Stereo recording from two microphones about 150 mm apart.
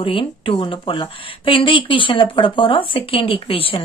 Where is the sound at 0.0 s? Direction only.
35° left (ahead or behind).